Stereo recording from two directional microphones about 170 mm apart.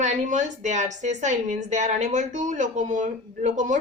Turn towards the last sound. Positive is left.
turn(degrees=-45)  # may be behind; listen again after turning